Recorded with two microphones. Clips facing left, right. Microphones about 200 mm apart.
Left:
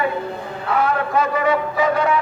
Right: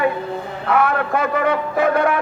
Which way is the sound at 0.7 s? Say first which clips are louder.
Right 1 dB; 60° right (ahead or behind).